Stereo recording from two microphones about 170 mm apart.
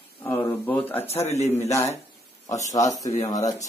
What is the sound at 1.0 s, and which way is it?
Speech, 35° left (ahead or behind).